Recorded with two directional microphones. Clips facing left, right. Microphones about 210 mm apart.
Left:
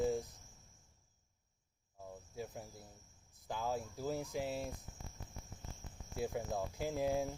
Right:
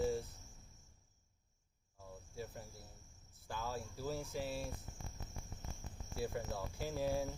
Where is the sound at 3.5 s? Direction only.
15° left (ahead or behind).